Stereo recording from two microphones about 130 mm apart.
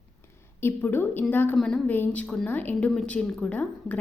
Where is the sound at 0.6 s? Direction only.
15° left (ahead or behind).